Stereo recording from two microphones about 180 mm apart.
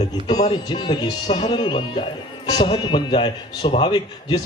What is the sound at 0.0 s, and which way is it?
A man's voice, 25° left (ahead or behind).